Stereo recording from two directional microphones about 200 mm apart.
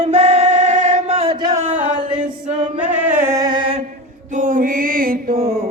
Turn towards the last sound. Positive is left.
turn(degrees=-50)  # may be behind; listen again after turning